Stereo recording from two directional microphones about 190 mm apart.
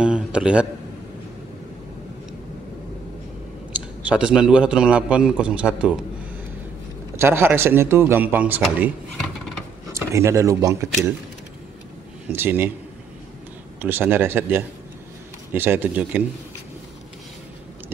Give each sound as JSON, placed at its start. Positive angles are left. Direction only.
{"t": 0.0, "sound": "a man's voice", "side_deg": -5}
{"t": 4.0, "sound": "a man's voice", "side_deg": -5}
{"t": 7.2, "sound": "speech", "side_deg": -15}
{"t": 9.9, "sound": "speech", "side_deg": -15}
{"t": 12.3, "sound": "speech", "side_deg": -10}
{"t": 13.7, "sound": "speech", "side_deg": -10}